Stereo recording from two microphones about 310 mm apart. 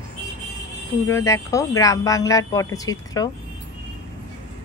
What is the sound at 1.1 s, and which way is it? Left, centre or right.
A woman's voice, centre.